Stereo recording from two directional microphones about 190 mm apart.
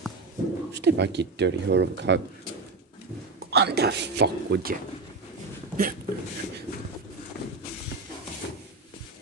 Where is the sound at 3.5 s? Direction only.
60° right (ahead or behind).